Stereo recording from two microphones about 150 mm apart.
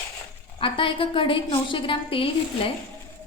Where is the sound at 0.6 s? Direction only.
35° left (ahead or behind).